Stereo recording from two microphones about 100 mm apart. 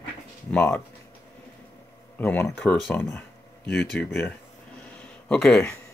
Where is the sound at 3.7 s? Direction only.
15° left (ahead or behind).